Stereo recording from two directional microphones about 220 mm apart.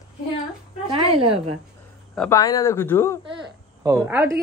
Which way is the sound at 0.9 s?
25° right (ahead or behind).